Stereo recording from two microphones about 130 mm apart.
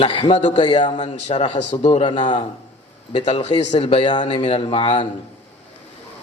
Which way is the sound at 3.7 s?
50° left (ahead or behind).